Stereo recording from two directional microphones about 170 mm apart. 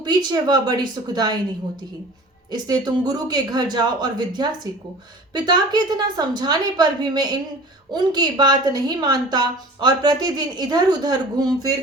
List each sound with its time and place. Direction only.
0.0 s a woman's voice: 25° right (ahead or behind)
2.5 s a woman's voice: 25° right (ahead or behind)